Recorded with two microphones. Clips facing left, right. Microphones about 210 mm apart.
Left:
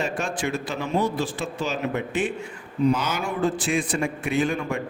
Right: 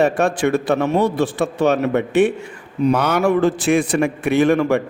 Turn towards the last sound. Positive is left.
turn(degrees=-75)  # may be behind; listen again after turning